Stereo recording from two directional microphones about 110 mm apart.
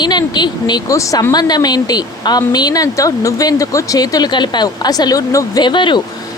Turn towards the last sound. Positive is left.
turn(degrees=45)  # may be behind; listen again after turning